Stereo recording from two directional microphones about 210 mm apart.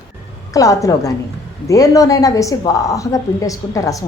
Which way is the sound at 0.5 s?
15° left (ahead or behind).